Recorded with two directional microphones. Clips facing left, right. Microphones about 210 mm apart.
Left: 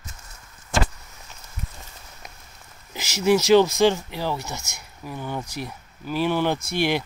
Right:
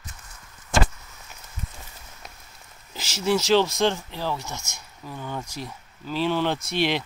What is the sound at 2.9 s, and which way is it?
Speech, 10° left (ahead or behind).